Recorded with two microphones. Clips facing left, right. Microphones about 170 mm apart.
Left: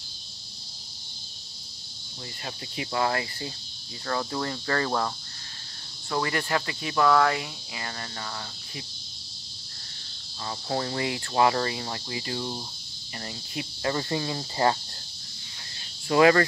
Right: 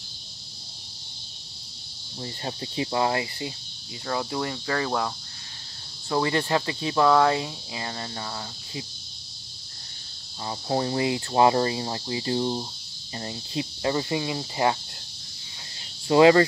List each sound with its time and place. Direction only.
2.4 s cricket: 30° right (ahead or behind)
4.1 s speech: 15° right (ahead or behind)
6.0 s cricket: 20° right (ahead or behind)
10.4 s cricket: 20° right (ahead or behind)
13.9 s speech: 15° right (ahead or behind)
16.1 s cricket: 20° right (ahead or behind)